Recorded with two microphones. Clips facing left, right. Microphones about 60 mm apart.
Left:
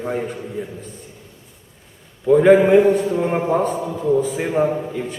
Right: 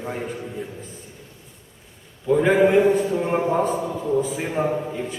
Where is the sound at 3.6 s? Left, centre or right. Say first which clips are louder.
Left 3 dB; centre.